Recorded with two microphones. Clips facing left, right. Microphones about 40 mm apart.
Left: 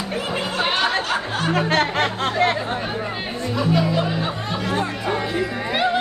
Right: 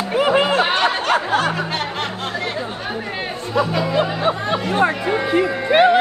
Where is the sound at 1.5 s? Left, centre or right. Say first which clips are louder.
Left 4 dB; left.